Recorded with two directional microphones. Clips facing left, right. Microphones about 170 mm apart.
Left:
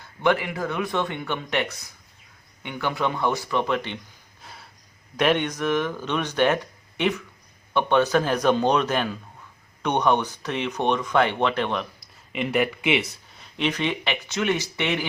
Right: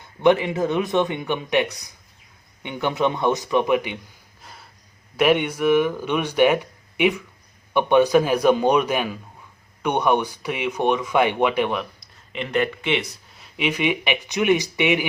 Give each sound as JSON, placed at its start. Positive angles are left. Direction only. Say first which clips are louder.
{"t": 0.0, "sound": "speech", "louder": "right 5 dB", "side_deg": -20}
{"t": 4.4, "sound": "a sound", "louder": "even", "side_deg": 0}
{"t": 5.1, "sound": "speech", "louder": "right 3 dB", "side_deg": -5}
{"t": 12.3, "sound": "speech", "louder": "even", "side_deg": 5}